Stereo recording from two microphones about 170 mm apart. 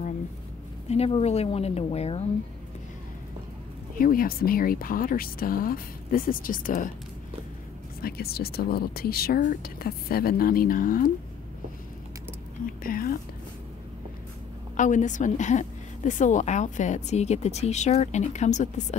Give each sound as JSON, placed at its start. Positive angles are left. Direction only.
{"t": 0.8, "sound": "speech", "side_deg": 35}
{"t": 4.0, "sound": "speech", "side_deg": 55}
{"t": 8.0, "sound": "speech", "side_deg": 65}
{"t": 12.6, "sound": "speech", "side_deg": 55}
{"t": 14.8, "sound": "a woman's voice", "side_deg": 45}